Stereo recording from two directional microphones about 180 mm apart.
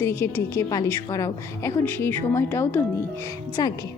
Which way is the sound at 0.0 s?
15° left (ahead or behind).